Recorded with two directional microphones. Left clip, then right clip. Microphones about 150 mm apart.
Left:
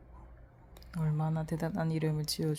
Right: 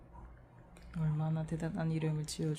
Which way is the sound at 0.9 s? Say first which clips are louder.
Left 4 dB; 35° left (ahead or behind).